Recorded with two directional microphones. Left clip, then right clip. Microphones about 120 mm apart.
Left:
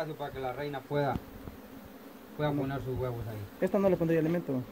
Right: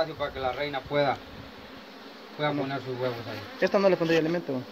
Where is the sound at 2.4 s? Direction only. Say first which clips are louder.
Right 4 dB; 20° right (ahead or behind).